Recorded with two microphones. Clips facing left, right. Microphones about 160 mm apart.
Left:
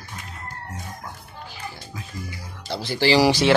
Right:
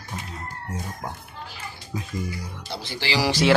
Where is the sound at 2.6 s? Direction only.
40° left (ahead or behind).